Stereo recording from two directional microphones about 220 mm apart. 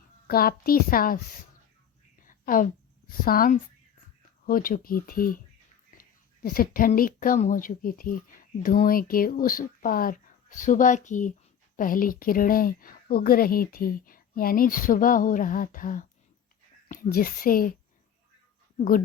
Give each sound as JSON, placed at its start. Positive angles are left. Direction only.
{"t": 0.3, "sound": "speech", "side_deg": 40}
{"t": 2.2, "sound": "a sound", "side_deg": 40}
{"t": 3.1, "sound": "speech", "side_deg": 40}